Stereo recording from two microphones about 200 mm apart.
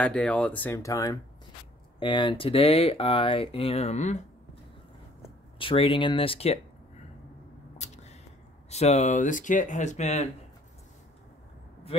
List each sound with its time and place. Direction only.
0.0 s speech: 5° left (ahead or behind); by 4.2 s 35° left (ahead or behind)
5.6 s speech: 25° left (ahead or behind)
7.7 s a sound: 35° left (ahead or behind)
8.6 s speech: 35° left (ahead or behind)
11.9 s speech: 30° left (ahead or behind)